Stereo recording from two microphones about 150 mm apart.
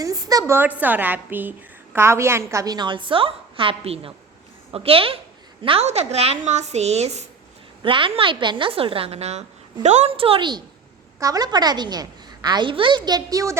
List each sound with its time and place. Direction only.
0.0 s a woman's voice: 25° right (ahead or behind); by 7.3 s 45° right (ahead or behind)
7.8 s a woman's voice: 35° right (ahead or behind)